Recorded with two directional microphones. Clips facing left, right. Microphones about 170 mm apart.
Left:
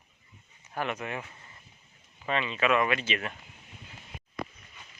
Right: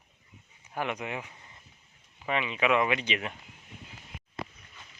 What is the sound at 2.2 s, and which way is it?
Speech, 15° right (ahead or behind).